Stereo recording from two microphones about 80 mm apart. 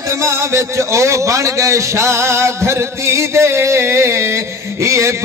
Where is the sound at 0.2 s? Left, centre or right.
Right.